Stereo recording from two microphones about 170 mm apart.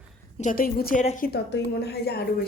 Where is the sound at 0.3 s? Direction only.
50° left (ahead or behind).